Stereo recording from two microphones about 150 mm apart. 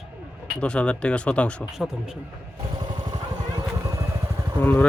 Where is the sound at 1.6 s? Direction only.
5° right (ahead or behind).